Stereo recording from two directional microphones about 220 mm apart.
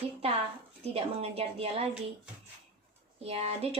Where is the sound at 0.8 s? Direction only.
25° right (ahead or behind).